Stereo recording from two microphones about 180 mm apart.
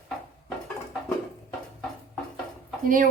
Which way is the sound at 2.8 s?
50° right (ahead or behind).